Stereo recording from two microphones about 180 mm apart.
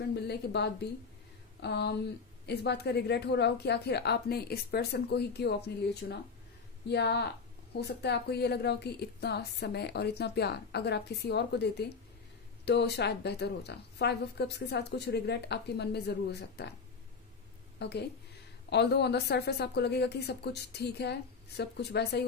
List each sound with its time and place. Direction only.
0.1 s a woman's voice: 65° left (ahead or behind)
17.7 s a woman's voice: 70° left (ahead or behind)